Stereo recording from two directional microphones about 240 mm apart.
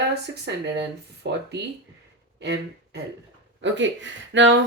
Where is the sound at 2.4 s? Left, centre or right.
Right.